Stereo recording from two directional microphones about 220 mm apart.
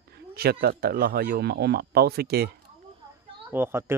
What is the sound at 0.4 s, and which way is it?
Speech, 45° right (ahead or behind).